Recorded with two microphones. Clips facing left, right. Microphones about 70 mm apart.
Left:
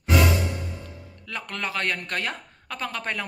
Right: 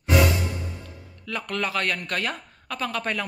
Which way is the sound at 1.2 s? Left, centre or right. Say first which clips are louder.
Right 4 dB; left.